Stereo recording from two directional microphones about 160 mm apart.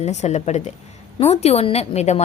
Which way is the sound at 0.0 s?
45° left (ahead or behind).